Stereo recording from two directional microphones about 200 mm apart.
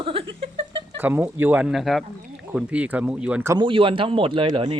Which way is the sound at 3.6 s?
25° right (ahead or behind).